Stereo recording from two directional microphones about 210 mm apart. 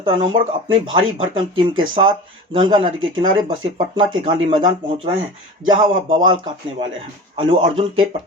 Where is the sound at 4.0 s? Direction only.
25° right (ahead or behind).